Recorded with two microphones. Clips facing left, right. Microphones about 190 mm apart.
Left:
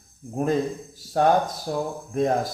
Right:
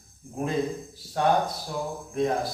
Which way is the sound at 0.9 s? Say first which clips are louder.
Left 4 dB; 45° left (ahead or behind).